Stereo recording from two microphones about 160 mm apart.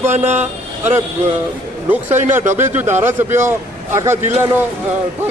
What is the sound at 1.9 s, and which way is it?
A man's voice, 15° right (ahead or behind).